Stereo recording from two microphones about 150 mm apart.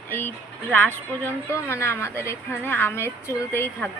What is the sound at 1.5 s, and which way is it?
A woman's voice, 15° left (ahead or behind).